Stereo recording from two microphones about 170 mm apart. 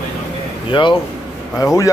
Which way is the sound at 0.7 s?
30° left (ahead or behind).